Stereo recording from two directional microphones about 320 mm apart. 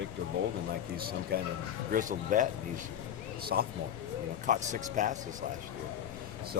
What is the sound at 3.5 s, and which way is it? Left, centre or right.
Speech, right.